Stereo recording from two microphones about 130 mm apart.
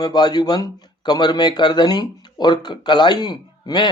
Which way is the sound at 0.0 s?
30° left (ahead or behind).